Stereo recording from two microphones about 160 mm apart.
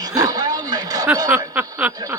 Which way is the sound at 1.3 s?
10° right (ahead or behind).